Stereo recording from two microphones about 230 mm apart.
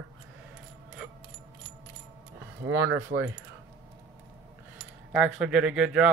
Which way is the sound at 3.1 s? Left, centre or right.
Right.